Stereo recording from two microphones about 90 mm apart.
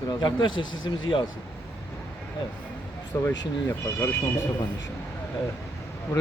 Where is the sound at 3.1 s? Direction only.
30° left (ahead or behind).